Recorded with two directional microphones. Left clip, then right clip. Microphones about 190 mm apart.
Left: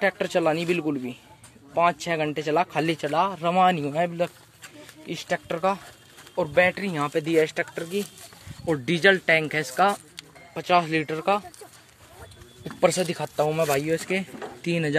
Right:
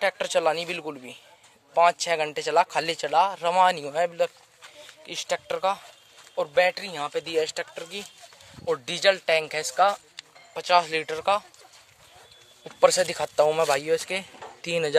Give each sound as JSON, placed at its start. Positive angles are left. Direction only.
{"t": 0.0, "sound": "speech", "side_deg": -30}
{"t": 12.9, "sound": "speech", "side_deg": -40}